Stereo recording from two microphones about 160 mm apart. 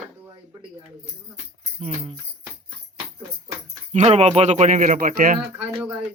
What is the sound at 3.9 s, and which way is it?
Speech, 40° right (ahead or behind).